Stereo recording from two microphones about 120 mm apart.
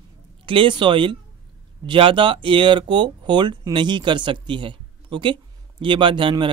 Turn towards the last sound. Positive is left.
turn(degrees=-45)  # may be behind; listen again after turning